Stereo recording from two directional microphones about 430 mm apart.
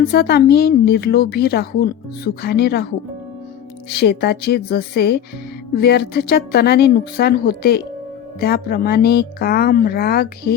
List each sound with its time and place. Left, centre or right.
0.1 s a woman's voice: left
3.8 s a woman's voice: left